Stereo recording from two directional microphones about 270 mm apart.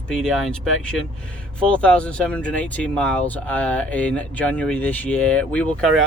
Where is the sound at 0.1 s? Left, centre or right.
Centre.